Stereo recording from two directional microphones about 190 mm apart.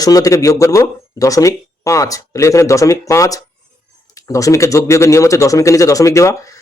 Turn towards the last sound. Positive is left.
turn(degrees=15)  # may be behind; listen again after turning